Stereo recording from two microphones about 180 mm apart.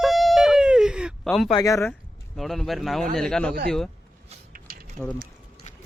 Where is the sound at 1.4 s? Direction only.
20° left (ahead or behind).